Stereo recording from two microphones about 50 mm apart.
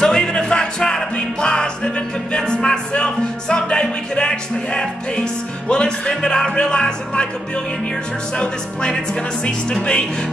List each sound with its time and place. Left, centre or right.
0.0 s music: centre
8.4 s speech: centre